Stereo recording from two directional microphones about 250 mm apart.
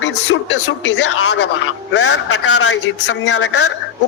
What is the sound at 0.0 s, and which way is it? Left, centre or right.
A man's voice, left.